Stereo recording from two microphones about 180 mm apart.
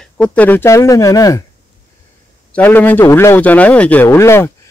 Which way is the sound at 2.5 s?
10° left (ahead or behind).